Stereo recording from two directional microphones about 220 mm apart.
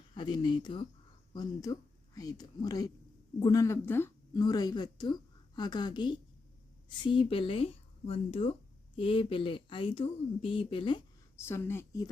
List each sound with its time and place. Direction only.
0.1 s speech: 20° left (ahead or behind)
11.3 s a woman's voice: 10° left (ahead or behind)